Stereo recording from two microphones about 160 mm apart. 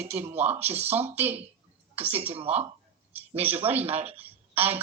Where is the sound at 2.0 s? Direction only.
40° right (ahead or behind).